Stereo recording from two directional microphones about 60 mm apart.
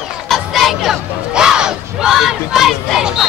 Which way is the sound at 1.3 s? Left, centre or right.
Centre.